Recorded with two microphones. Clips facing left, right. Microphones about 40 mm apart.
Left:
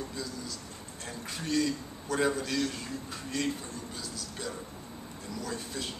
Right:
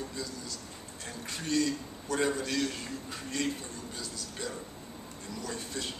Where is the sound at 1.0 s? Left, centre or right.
Centre.